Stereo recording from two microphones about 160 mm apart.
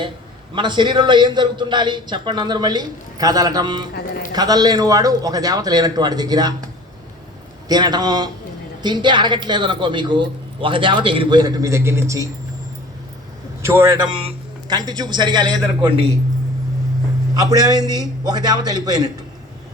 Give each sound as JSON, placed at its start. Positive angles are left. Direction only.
{"t": 0.5, "sound": "speech", "side_deg": -30}
{"t": 7.7, "sound": "speech", "side_deg": -25}
{"t": 13.6, "sound": "a man's voice", "side_deg": -15}
{"t": 14.0, "sound": "a man's voice", "side_deg": -30}
{"t": 17.3, "sound": "speech", "side_deg": -20}